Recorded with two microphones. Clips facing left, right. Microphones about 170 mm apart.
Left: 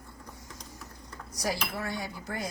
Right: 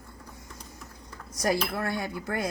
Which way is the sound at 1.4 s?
60° right (ahead or behind).